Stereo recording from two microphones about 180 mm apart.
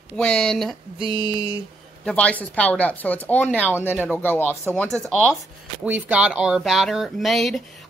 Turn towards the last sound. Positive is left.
turn(degrees=0)  # may be behind; listen again after turning